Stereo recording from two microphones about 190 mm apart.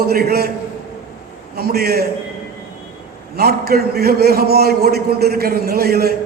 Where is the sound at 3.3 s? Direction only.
55° right (ahead or behind).